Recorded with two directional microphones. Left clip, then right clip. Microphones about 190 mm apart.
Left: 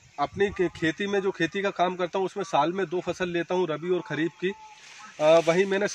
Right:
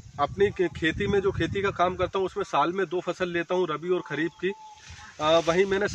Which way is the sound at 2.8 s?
30° left (ahead or behind).